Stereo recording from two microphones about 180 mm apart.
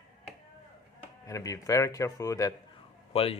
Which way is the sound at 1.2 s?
15° left (ahead or behind).